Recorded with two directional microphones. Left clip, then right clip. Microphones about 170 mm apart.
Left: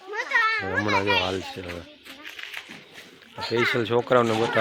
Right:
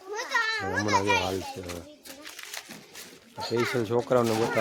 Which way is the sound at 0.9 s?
25° right (ahead or behind).